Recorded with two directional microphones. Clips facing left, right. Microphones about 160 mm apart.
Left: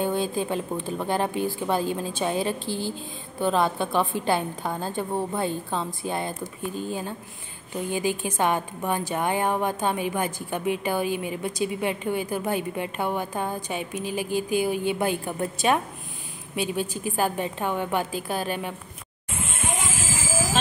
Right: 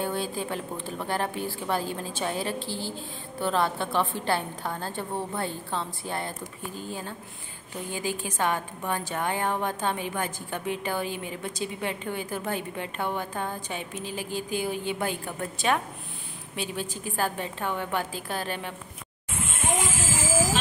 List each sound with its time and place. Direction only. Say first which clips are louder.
0.0 s a woman's voice: left 4 dB; 20° left (ahead or behind)